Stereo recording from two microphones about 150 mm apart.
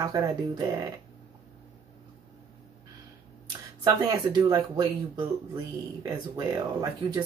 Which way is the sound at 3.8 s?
25° right (ahead or behind).